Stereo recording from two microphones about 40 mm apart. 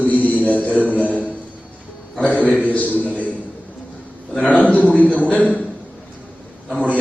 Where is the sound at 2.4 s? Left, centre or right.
Right.